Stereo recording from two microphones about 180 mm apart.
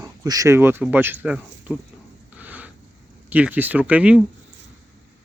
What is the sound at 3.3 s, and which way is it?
Speech, 10° right (ahead or behind).